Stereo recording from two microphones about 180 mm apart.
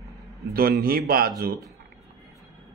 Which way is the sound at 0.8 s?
55° right (ahead or behind).